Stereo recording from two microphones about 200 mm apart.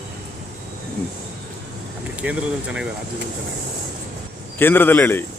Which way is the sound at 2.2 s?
5° right (ahead or behind).